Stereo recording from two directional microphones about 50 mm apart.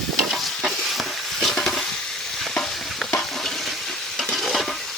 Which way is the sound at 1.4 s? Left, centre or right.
Centre.